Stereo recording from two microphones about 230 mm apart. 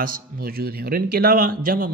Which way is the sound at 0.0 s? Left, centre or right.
Right.